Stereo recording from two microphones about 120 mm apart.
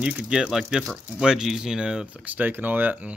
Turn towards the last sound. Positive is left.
turn(degrees=-10)  # may be behind; listen again after turning